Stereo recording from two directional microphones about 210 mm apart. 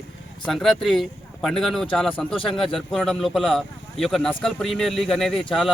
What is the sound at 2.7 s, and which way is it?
Speech, centre (ahead or behind).